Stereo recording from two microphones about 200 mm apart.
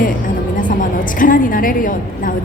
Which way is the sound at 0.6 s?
40° left (ahead or behind).